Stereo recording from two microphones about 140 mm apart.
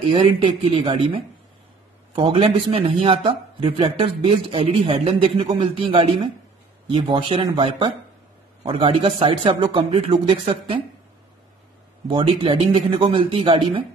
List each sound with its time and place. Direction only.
0.1 s speech: 35° right (ahead or behind)
8.6 s speech: 40° right (ahead or behind)
12.1 s speech: 35° right (ahead or behind)